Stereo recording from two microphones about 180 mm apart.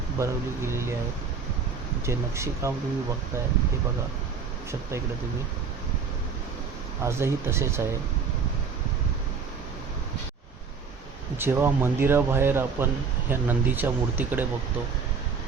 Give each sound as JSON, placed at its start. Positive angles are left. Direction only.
{"t": 0.2, "sound": "speech", "side_deg": -15}
{"t": 2.0, "sound": "speech", "side_deg": -15}
{"t": 7.0, "sound": "speech", "side_deg": -15}
{"t": 11.3, "sound": "speech", "side_deg": -15}